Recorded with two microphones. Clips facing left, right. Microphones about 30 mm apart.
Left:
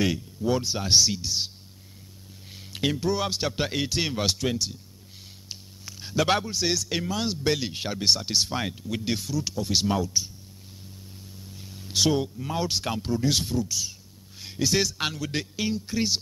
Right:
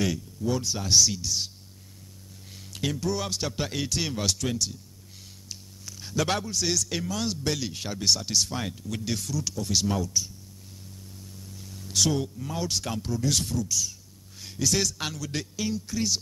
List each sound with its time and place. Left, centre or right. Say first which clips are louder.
0.0 s a man's voice: left 2 dB; left
2.7 s a man's voice: left 3 dB; left
11.3 s a man's voice: left 1 dB; left